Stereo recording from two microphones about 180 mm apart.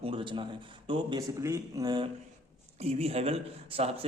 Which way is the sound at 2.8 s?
35° right (ahead or behind).